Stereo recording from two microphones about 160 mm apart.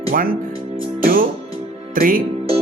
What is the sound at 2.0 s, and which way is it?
Speech, 60° right (ahead or behind).